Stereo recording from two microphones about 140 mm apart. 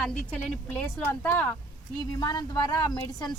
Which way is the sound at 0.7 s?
10° left (ahead or behind).